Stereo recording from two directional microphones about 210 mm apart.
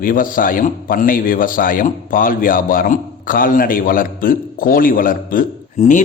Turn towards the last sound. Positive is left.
turn(degrees=35)  # may be behind; listen again after turning